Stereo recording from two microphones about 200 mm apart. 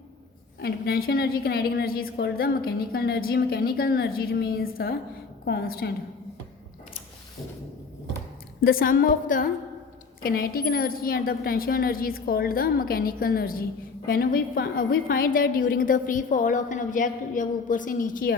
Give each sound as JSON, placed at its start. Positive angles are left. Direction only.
{"t": 0.6, "sound": "a woman's voice", "side_deg": 50}
{"t": 8.6, "sound": "a woman's voice", "side_deg": 45}